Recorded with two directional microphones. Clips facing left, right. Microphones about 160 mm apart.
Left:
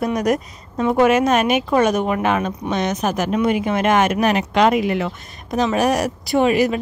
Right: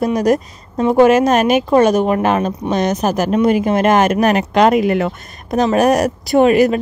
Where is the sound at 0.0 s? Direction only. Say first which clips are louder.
Right 4 dB; 30° right (ahead or behind).